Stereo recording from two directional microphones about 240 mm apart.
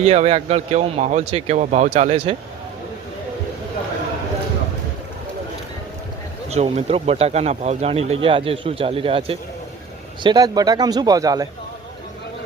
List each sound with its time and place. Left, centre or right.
0.0 s speech: right
6.5 s speech: right